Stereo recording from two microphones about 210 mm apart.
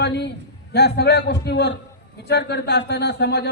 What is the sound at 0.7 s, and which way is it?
A man's voice, 50° left (ahead or behind).